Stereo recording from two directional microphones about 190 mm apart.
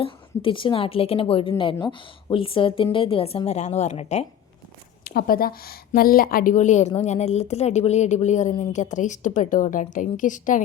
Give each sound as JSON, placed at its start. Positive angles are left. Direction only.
{"t": 0.0, "sound": "a woman's voice", "side_deg": 25}
{"t": 5.0, "sound": "a woman's voice", "side_deg": 50}